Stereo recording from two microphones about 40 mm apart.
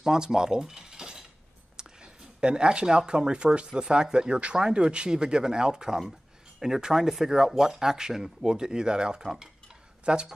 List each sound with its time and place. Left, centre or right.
0.0 s cutlery: centre
1.8 s speech: right
10.0 s speech: right